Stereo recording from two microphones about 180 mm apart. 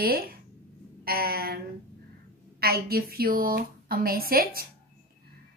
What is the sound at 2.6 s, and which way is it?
Speech, 55° right (ahead or behind).